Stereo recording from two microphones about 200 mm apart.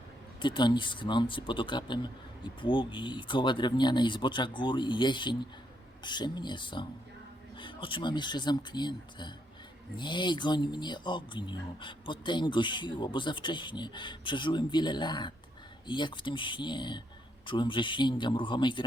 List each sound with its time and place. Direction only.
0.4 s speech: 25° left (ahead or behind)